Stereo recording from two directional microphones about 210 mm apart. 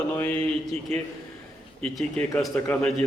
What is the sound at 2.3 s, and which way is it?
Speech, 10° left (ahead or behind).